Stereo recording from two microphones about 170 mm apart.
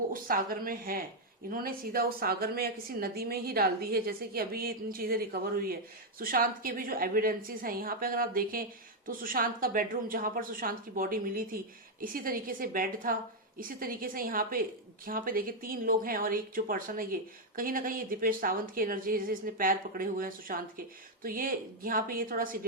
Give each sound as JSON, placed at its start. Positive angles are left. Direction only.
{"t": 0.1, "sound": "a woman's voice", "side_deg": -55}